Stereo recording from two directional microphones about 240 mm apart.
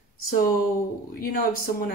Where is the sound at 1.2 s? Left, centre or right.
Left.